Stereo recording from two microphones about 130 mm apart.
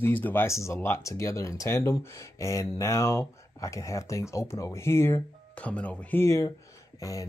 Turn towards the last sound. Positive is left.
turn(degrees=25)  # may be behind; listen again after turning